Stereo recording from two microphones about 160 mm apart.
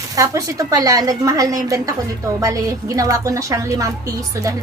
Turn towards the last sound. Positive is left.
turn(degrees=-20)  # may be behind; listen again after turning